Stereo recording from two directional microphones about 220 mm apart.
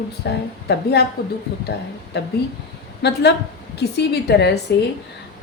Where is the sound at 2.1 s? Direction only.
50° left (ahead or behind).